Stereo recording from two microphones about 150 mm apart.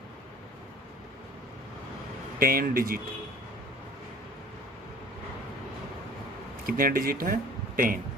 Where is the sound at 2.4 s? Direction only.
75° right (ahead or behind).